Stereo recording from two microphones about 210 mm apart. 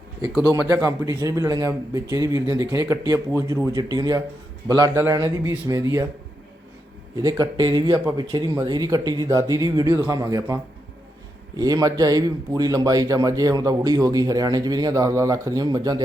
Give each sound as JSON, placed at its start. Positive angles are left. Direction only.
{"t": 0.7, "sound": "speech", "side_deg": -15}
{"t": 7.2, "sound": "speech", "side_deg": -20}